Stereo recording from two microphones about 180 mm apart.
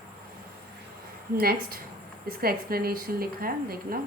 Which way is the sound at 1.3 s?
55° right (ahead or behind).